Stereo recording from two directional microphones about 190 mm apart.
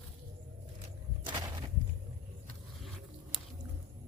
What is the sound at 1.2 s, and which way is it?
Walk, 20° right (ahead or behind).